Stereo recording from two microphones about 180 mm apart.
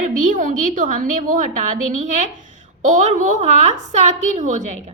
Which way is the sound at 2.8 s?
45° right (ahead or behind).